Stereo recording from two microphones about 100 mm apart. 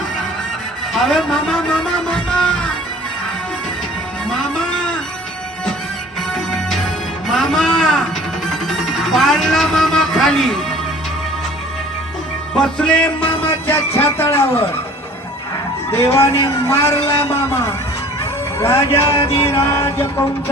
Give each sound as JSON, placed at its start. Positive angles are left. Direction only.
{"t": 0.9, "sound": "speech", "side_deg": 5}
{"t": 4.3, "sound": "music", "side_deg": 10}
{"t": 6.3, "sound": "music", "side_deg": 5}
{"t": 7.3, "sound": "a sound", "side_deg": 5}
{"t": 8.4, "sound": "music", "side_deg": 5}
{"t": 12.5, "sound": "music", "side_deg": 10}
{"t": 13.5, "sound": "speech", "side_deg": 25}
{"t": 15.9, "sound": "a man's voice", "side_deg": 30}
{"t": 17.5, "sound": "a sound", "side_deg": 30}
{"t": 18.6, "sound": "a man's voice", "side_deg": 30}
{"t": 18.9, "sound": "a sound", "side_deg": 30}